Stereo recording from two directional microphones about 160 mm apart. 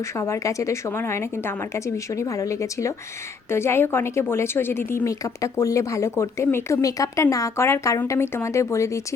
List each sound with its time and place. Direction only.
0.0 s a woman's voice: 15° left (ahead or behind)